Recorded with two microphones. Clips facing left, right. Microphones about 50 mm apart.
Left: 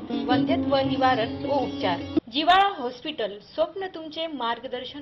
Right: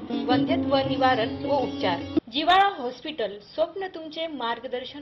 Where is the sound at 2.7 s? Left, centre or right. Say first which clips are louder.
Even; centre.